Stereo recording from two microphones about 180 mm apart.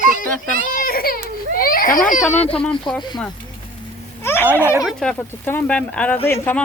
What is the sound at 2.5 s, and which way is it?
Speech, 5° left (ahead or behind).